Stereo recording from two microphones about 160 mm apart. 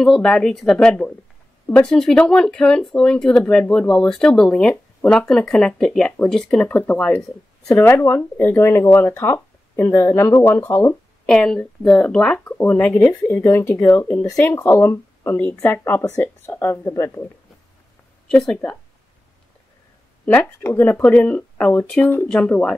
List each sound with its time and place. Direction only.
0.0 s speech: 5° left (ahead or behind)
7.6 s speech: 15° left (ahead or behind)
18.3 s speech: 5° left (ahead or behind)
20.2 s speech: 15° left (ahead or behind)